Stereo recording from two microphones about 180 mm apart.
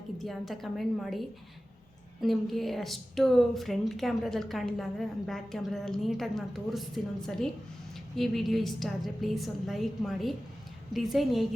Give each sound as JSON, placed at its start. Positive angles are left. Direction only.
{"t": 0.2, "sound": "a woman's voice", "side_deg": 0}